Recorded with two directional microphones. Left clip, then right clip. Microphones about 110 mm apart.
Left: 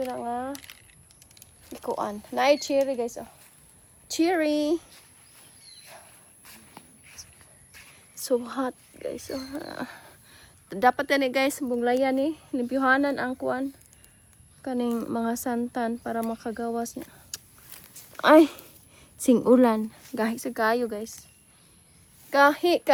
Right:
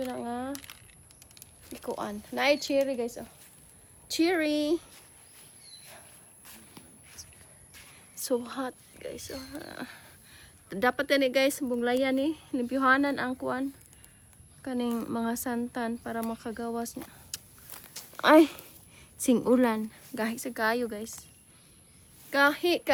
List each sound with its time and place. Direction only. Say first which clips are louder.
0.1 s speech: left 4 dB; 15° left (ahead or behind)
0.5 s speech: left 1 dB; 20° right (ahead or behind)
2.0 s speech: left 5 dB; 25° left (ahead or behind); by 5.0 s 10° left (ahead or behind)
5.8 s cricket: left 3 dB; 10° left (ahead or behind)
7.8 s a sound: left 2 dB; centre (ahead or behind)
8.4 s speech: left 5 dB; 15° left (ahead or behind)
9.0 s speech: left 7 dB; 35° left (ahead or behind)
10.2 s a sound: left 1 dB; 25° left (ahead or behind)
10.9 s speech: left 1 dB; 35° left (ahead or behind)
11.7 s a woman's voice: left 3 dB; 20° left (ahead or behind)
17.3 s walk: left 2 dB; 25° left (ahead or behind)
18.2 s a sound: left 3 dB; 10° left (ahead or behind)
19.9 s a woman's voice: left 4 dB; 25° left (ahead or behind)
22.3 s a woman's voice: left 5 dB; 25° left (ahead or behind)